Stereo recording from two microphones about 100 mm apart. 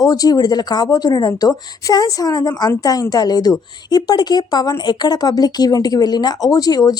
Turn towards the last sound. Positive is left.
turn(degrees=40)  # may be behind; listen again after turning